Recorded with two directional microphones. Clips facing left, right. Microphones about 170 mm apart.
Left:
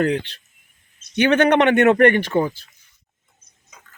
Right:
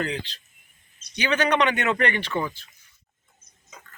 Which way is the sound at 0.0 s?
55° left (ahead or behind).